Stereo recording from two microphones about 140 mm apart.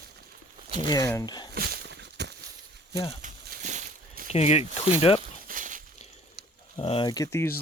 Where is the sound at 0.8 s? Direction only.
30° left (ahead or behind).